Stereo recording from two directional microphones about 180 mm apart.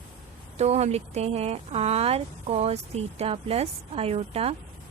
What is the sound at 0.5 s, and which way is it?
Speech, 35° right (ahead or behind).